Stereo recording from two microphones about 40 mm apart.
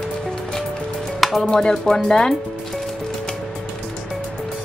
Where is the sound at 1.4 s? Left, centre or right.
Centre.